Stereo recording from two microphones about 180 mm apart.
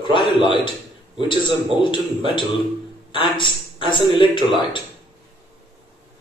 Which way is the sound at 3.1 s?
25° left (ahead or behind).